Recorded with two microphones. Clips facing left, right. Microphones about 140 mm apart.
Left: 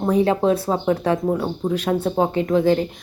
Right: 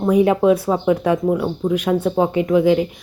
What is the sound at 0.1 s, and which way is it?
Speech, 15° right (ahead or behind).